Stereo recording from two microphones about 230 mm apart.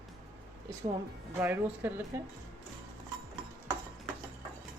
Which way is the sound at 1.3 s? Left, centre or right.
Centre.